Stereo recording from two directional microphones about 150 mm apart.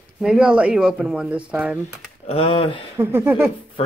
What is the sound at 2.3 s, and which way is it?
Speech, 35° left (ahead or behind).